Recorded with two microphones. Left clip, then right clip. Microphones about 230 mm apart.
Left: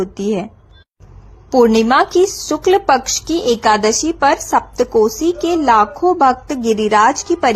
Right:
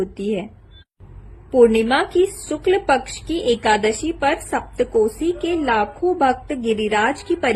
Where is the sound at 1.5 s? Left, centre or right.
Left.